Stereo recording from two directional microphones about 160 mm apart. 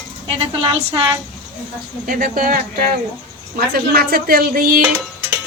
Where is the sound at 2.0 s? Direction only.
60° right (ahead or behind).